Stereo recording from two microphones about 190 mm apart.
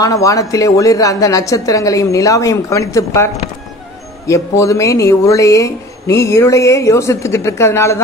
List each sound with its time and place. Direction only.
0.0 s speech: 15° left (ahead or behind)
4.3 s speech: 15° left (ahead or behind)